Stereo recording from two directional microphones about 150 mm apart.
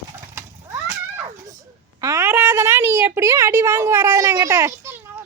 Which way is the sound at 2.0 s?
20° right (ahead or behind).